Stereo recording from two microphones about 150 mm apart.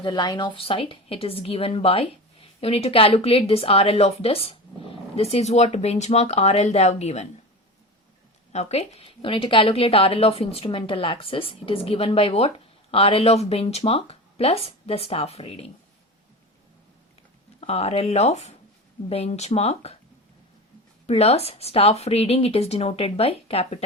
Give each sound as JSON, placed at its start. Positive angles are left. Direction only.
{"t": 0.0, "sound": "a woman's voice", "side_deg": 30}
{"t": 8.5, "sound": "a woman's voice", "side_deg": 45}
{"t": 17.6, "sound": "speech", "side_deg": 40}
{"t": 21.1, "sound": "speech", "side_deg": 45}